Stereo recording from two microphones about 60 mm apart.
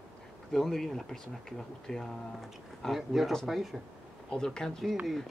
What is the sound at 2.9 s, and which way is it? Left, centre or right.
Speech, centre.